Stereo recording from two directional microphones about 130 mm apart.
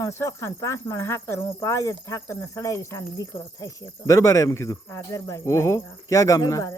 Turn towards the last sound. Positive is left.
turn(degrees=25)  # may be behind; listen again after turning